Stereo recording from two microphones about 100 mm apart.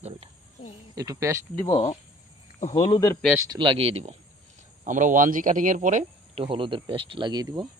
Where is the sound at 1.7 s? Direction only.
90° left.